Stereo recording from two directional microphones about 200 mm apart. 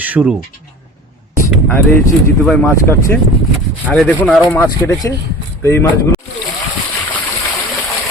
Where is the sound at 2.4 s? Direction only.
10° left (ahead or behind).